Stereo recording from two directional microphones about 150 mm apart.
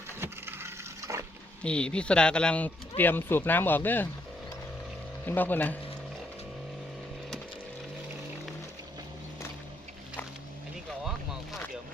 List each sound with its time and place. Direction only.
0.2 s wood: 15° right (ahead or behind)
1.6 s speech: 5° left (ahead or behind)
5.2 s speech: 15° left (ahead or behind)